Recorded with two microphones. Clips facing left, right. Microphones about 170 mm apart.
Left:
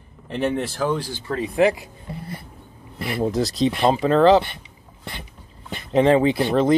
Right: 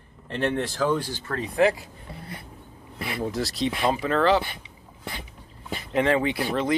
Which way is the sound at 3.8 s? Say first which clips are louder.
Left 7 dB; 25° left (ahead or behind).